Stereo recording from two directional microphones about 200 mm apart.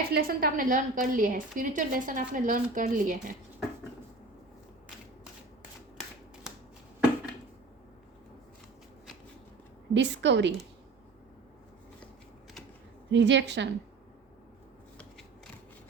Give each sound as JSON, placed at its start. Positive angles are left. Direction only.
{"t": 0.1, "sound": "a woman's voice", "side_deg": -50}
{"t": 6.5, "sound": "finger snapping", "side_deg": 0}
{"t": 9.9, "sound": "a woman's voice", "side_deg": -60}
{"t": 13.1, "sound": "a woman's voice", "side_deg": -60}